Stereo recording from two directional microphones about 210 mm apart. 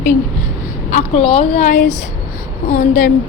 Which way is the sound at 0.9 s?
35° left (ahead or behind).